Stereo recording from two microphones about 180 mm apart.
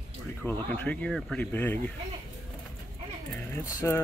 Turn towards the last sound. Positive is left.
turn(degrees=15)  # may be behind; listen again after turning